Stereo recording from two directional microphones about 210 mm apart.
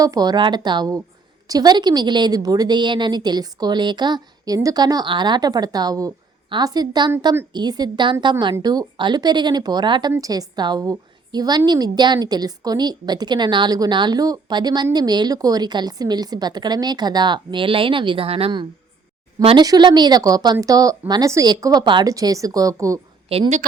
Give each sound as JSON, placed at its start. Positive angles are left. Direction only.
{"t": 0.0, "sound": "a woman's voice", "side_deg": -20}
{"t": 23.3, "sound": "a woman's voice", "side_deg": -25}